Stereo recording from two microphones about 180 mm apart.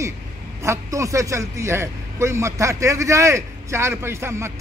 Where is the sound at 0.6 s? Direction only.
15° right (ahead or behind).